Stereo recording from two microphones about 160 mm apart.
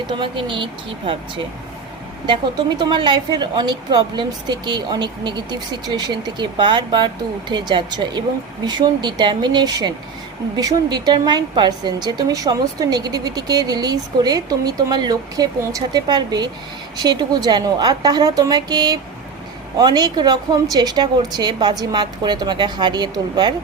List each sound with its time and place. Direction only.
0.1 s speech: 30° right (ahead or behind)
2.2 s a woman's voice: 30° right (ahead or behind)